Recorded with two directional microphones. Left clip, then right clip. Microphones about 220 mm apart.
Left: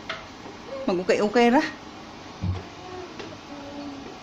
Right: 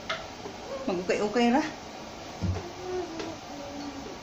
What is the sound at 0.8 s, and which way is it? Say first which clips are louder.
Speech: left 6 dB; 45° left (ahead or behind).